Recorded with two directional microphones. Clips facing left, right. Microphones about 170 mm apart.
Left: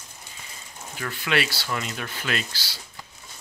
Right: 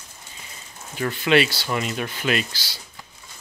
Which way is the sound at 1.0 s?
25° right (ahead or behind).